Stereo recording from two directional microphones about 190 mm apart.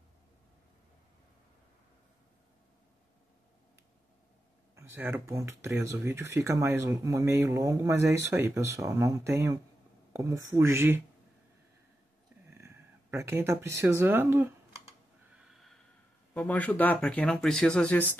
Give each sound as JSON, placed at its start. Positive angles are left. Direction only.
{"t": 4.7, "sound": "speech", "side_deg": -10}
{"t": 12.4, "sound": "speech", "side_deg": -15}
{"t": 15.3, "sound": "snort", "side_deg": 0}
{"t": 16.3, "sound": "speech", "side_deg": 10}